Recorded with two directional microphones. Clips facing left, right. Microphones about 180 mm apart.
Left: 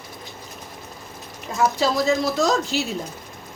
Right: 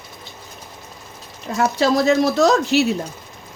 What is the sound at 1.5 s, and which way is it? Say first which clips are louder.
A woman's voice: right 3 dB; 70° right (ahead or behind).